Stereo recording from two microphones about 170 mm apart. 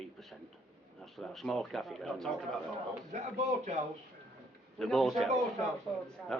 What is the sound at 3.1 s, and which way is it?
Speech, 40° right (ahead or behind).